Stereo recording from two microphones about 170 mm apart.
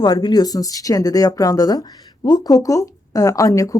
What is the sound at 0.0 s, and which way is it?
Speech, 25° left (ahead or behind).